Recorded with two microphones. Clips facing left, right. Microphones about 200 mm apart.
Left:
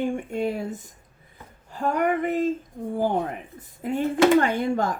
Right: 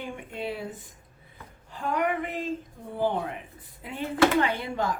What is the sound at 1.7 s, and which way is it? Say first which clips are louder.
Speech: left 4 dB; 45° left (ahead or behind).